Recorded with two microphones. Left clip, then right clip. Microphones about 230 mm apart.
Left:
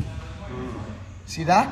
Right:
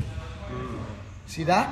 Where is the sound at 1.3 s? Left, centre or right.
Centre.